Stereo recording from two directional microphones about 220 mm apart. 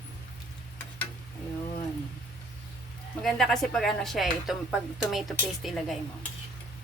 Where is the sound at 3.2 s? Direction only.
Centre (ahead or behind).